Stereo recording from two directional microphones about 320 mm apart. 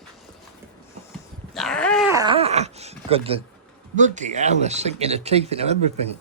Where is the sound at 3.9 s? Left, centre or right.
Right.